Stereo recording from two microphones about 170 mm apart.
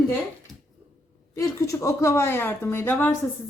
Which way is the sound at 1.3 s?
20° left (ahead or behind).